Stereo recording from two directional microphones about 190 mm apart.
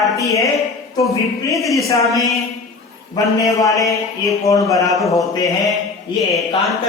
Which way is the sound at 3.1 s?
15° left (ahead or behind).